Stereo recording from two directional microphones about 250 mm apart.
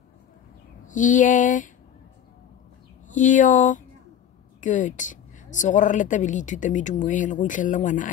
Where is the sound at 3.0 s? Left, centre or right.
Left.